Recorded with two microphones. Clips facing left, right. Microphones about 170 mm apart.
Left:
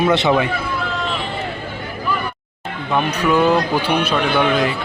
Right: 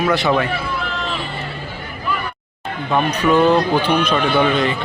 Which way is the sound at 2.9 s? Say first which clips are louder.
Right 1 dB; 10° left (ahead or behind).